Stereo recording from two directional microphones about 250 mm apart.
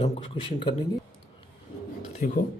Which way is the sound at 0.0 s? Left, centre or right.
Left.